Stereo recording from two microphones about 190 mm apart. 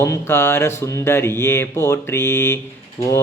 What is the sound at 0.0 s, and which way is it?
Mantra, 15° left (ahead or behind).